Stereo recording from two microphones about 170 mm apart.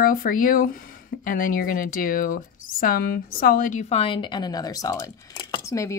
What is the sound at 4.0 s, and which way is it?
Speech, 30° left (ahead or behind).